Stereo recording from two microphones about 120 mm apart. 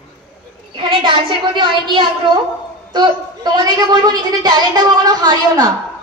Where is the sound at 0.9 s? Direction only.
45° right (ahead or behind).